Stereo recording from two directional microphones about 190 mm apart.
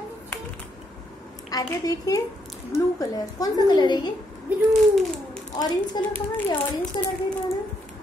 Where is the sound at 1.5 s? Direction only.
20° left (ahead or behind).